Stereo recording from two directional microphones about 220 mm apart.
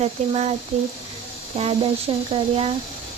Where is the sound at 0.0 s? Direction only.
30° right (ahead or behind).